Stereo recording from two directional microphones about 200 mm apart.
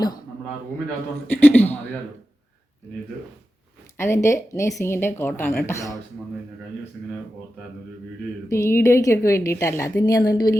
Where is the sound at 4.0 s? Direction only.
15° left (ahead or behind).